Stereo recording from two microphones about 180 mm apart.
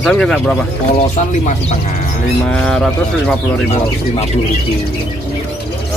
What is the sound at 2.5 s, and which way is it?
Speech, 5° left (ahead or behind).